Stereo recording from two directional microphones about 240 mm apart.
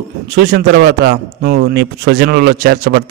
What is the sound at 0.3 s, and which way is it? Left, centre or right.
A man's voice, right.